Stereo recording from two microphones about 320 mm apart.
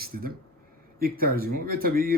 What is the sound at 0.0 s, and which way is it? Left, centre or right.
Speech, right.